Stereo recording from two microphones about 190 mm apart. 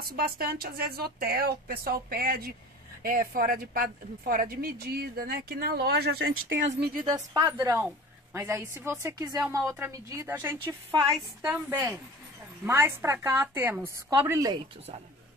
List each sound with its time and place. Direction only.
0.0 s a woman's voice: 50° right (ahead or behind); by 6.7 s 85° right
7.0 s a woman's voice: 20° right (ahead or behind)